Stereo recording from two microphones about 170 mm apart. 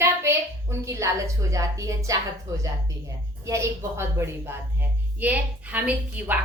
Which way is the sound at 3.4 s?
15° right (ahead or behind).